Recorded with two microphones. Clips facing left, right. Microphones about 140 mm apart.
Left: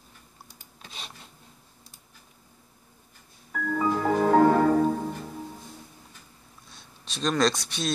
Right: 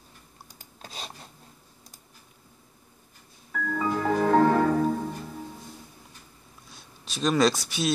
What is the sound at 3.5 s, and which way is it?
Music, 5° left (ahead or behind).